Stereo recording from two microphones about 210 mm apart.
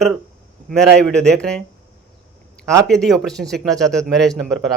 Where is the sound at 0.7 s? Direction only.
5° left (ahead or behind).